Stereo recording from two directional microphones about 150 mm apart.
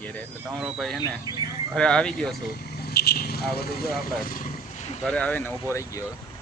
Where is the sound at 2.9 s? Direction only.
90° left.